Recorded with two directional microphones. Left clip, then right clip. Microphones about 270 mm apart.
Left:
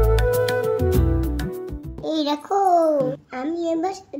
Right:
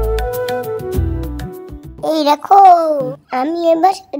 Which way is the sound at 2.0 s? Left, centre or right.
Right.